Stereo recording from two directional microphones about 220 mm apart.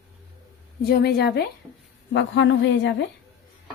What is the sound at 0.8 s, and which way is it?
A woman's voice, 45° left (ahead or behind).